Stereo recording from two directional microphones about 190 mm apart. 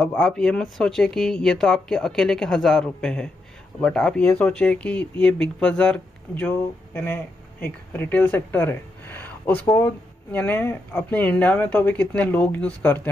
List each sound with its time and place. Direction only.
0.0 s speech: 5° left (ahead or behind)